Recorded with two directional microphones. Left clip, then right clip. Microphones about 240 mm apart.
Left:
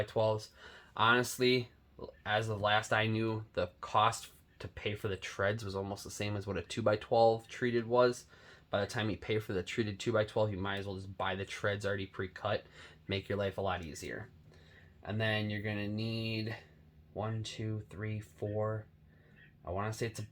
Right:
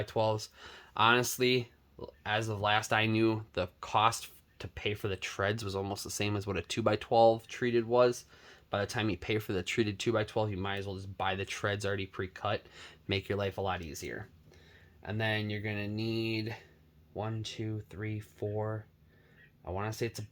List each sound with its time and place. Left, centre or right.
0.0 s speech: right